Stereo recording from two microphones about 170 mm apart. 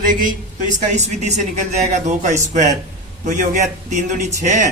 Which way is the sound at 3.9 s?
45° right (ahead or behind).